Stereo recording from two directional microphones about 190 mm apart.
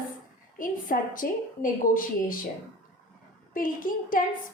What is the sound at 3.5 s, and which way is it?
Speech, 45° left (ahead or behind).